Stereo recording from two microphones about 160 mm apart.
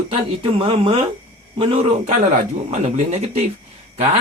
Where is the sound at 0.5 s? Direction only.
35° right (ahead or behind).